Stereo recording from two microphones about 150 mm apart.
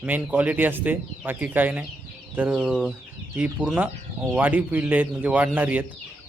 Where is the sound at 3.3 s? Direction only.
10° right (ahead or behind).